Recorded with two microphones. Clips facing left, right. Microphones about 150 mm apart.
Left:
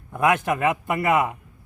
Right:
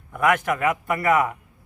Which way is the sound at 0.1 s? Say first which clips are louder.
Even; 25° left (ahead or behind).